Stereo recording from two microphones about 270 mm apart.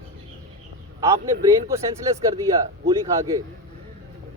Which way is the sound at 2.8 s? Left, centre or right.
Centre.